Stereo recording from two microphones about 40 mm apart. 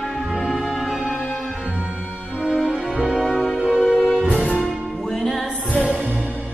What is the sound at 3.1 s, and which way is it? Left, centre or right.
Music, centre.